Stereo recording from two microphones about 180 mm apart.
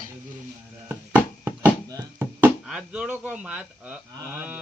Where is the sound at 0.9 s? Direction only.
10° right (ahead or behind).